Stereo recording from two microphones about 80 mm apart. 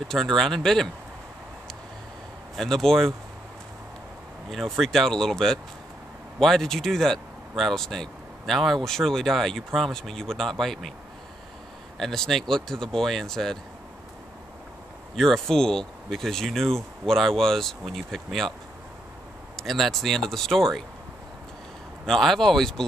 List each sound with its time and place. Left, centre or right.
0.1 s speech: centre
2.5 s speech: centre
4.5 s speech: centre
12.0 s speech: centre
15.1 s speech: centre
19.5 s speech: centre
22.0 s speech: centre